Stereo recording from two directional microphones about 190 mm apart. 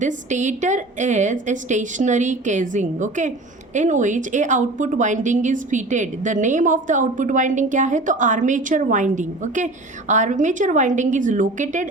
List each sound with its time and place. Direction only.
0.0 s a woman's voice: 40° right (ahead or behind)